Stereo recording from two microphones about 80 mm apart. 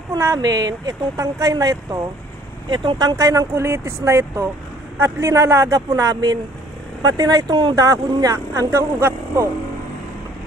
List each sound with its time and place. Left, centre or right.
0.1 s speech: right
2.6 s speech: right
3.0 s speech: right
7.4 s speech: right
7.8 s speech: right
9.0 s speech: right